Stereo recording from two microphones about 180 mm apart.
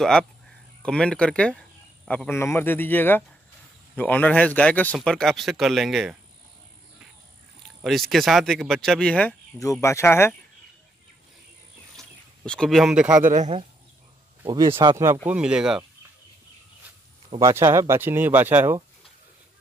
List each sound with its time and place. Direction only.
0.0 s speech: 5° left (ahead or behind)
7.8 s speech: centre (ahead or behind)
9.6 s speech: 15° left (ahead or behind)
12.0 s speech: 5° left (ahead or behind)
13.2 s speech: 40° right (ahead or behind)
14.5 s speech: 20° right (ahead or behind)
15.2 s speech: 5° right (ahead or behind)
17.4 s speech: 15° right (ahead or behind)